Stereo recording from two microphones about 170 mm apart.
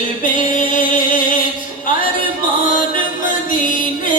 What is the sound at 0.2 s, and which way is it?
Music, 50° left (ahead or behind).